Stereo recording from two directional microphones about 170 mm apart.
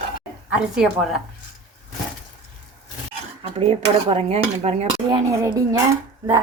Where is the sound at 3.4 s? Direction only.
35° right (ahead or behind).